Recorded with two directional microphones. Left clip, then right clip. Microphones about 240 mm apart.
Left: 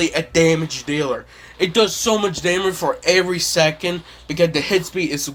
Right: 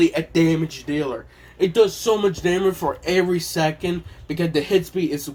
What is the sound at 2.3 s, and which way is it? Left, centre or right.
Speech, left.